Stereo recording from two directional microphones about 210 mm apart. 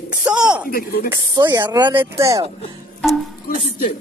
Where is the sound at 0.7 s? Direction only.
45° left (ahead or behind).